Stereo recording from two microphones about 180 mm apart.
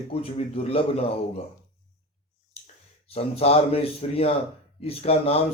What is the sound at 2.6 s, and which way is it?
Speech, 35° left (ahead or behind).